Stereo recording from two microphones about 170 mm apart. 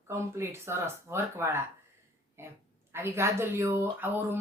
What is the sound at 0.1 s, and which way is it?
Speech, 15° right (ahead or behind).